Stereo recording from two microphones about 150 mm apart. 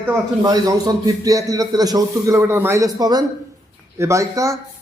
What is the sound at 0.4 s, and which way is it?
A man's voice, 25° right (ahead or behind).